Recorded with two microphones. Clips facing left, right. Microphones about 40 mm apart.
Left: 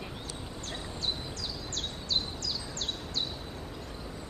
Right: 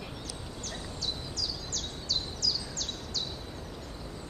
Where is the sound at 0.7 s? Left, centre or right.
Left.